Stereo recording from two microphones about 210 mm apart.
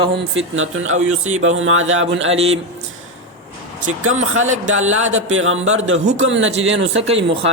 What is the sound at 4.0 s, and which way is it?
Speech, 75° right (ahead or behind).